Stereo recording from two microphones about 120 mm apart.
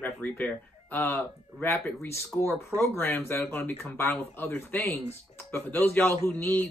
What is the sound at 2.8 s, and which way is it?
Speech, 20° left (ahead or behind).